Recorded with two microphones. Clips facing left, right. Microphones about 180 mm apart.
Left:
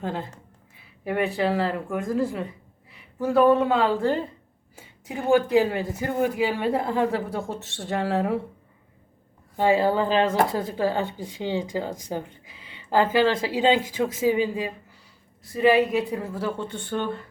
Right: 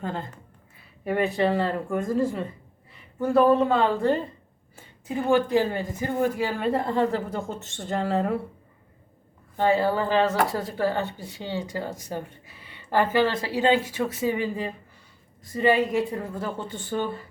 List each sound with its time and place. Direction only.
0.0 s speech: 5° left (ahead or behind)
4.8 s a woman's voice: 15° left (ahead or behind)
9.6 s speech: 10° left (ahead or behind)
12.5 s a sound: 15° left (ahead or behind)
13.1 s speech: 10° left (ahead or behind); by 17.2 s 5° right (ahead or behind)